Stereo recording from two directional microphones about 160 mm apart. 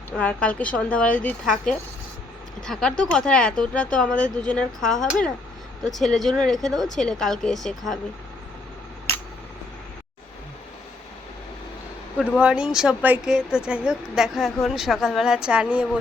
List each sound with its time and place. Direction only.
0.2 s a woman's voice: 10° left (ahead or behind)
12.1 s a woman's voice: 5° right (ahead or behind)